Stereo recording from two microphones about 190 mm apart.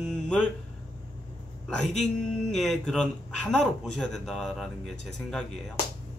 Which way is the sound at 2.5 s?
Centre (ahead or behind).